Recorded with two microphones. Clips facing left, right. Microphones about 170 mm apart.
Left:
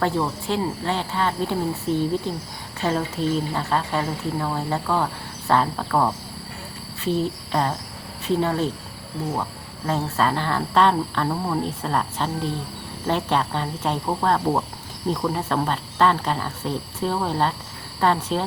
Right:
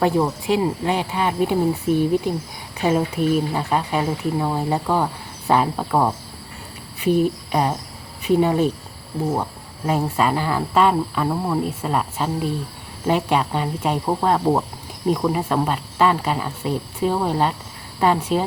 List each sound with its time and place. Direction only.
0.0 s speech: 15° right (ahead or behind)
7.0 s cricket: 15° right (ahead or behind)
8.2 s speech: 15° right (ahead or behind)